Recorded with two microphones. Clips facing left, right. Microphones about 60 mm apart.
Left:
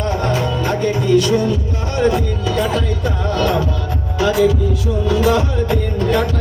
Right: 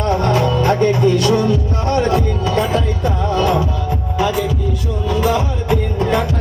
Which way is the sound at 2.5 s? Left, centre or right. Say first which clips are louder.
Even; right.